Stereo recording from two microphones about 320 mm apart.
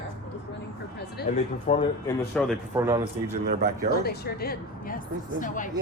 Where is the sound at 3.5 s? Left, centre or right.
Right.